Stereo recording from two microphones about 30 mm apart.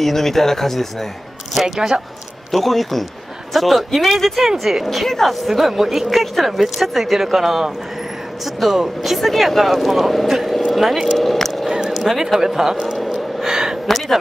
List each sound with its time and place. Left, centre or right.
0.0 s speech: centre
1.8 s speech: centre
2.5 s speech: centre
4.7 s speech: right
5.0 s speech: centre
5.3 s speech: centre
6.1 s speech: centre
10.7 s a sound: centre
11.1 s vehicle: centre
11.9 s speech: centre
12.9 s gasp: centre
13.5 s a sound: centre
13.8 s speech: centre